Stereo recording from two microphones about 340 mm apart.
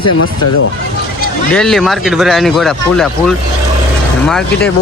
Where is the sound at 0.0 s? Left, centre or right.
Left.